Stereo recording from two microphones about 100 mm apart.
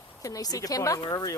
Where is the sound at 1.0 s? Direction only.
50° left (ahead or behind).